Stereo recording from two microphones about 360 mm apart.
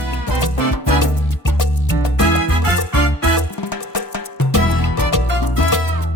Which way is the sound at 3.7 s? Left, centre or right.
Left.